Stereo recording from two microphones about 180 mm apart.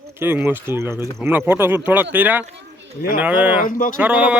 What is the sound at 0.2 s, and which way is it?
Speech, 10° right (ahead or behind).